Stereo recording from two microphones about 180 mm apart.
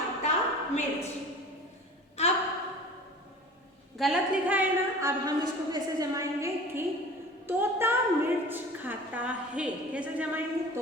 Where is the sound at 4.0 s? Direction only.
5° right (ahead or behind).